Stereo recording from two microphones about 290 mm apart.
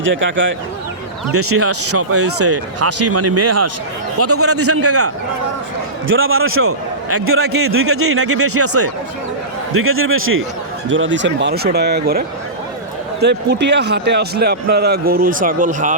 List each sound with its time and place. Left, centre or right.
0.2 s a man's voice: right